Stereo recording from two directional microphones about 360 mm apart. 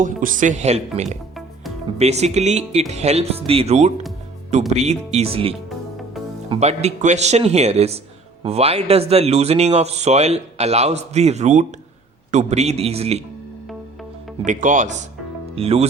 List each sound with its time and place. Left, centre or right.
0.0 s speech: right
14.4 s speech: right